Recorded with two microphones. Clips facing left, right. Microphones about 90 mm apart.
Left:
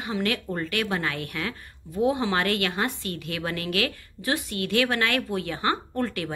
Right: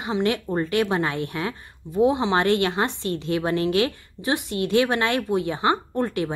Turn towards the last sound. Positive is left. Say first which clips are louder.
# right 4 dB
turn(degrees=-20)  # may be behind; listen again after turning